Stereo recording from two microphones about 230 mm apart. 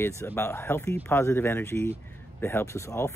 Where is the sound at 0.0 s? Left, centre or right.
Centre.